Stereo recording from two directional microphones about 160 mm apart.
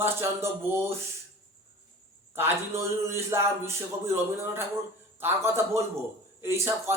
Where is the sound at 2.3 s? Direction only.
15° right (ahead or behind).